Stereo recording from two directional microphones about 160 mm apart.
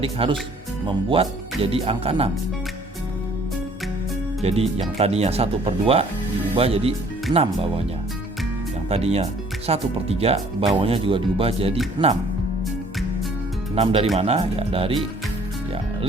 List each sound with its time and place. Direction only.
0.0 s speech: 35° right (ahead or behind)
4.4 s speech: 40° right (ahead or behind)
8.9 s speech: 40° right (ahead or behind)
13.7 s speech: 40° right (ahead or behind)